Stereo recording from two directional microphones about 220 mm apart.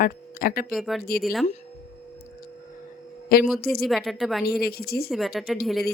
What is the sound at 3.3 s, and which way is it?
Speech, 45° left (ahead or behind).